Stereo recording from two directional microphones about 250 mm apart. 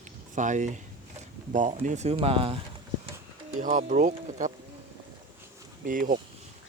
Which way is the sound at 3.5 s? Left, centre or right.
Right.